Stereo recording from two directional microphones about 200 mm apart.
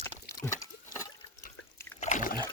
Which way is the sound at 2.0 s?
40° left (ahead or behind).